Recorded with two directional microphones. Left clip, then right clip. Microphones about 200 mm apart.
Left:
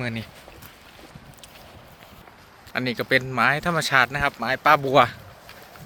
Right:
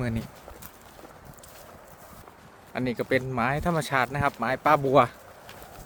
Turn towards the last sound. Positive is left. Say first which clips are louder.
# left 3 dB
turn(degrees=-10)  # may be behind; listen again after turning